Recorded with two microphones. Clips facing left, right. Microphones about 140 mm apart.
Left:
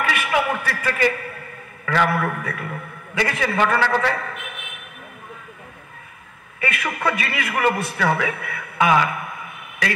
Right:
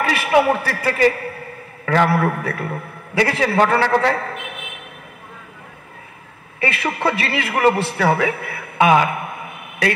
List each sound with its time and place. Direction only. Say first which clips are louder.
0.0 s a man's voice: right 6 dB; 35° right (ahead or behind)
6.6 s a man's voice: right 3 dB; 30° right (ahead or behind)